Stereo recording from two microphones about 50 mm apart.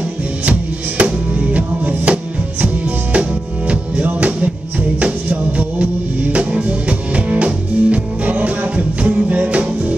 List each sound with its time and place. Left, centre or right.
0.5 s music: right